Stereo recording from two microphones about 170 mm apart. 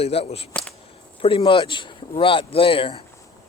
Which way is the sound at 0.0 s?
35° left (ahead or behind).